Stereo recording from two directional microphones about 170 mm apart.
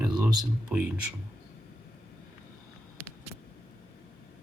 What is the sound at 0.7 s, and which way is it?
Speech, 5° right (ahead or behind).